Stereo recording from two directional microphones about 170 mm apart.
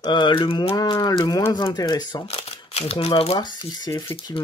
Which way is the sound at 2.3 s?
35° left (ahead or behind).